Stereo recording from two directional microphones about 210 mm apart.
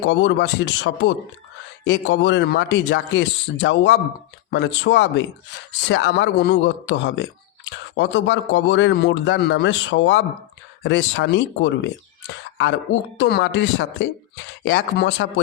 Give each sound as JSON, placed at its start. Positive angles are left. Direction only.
{"t": 0.0, "sound": "speech", "side_deg": 60}